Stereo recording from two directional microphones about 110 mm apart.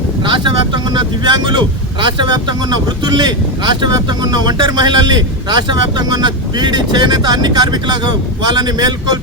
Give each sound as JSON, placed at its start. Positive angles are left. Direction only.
{"t": 0.3, "sound": "speech", "side_deg": -45}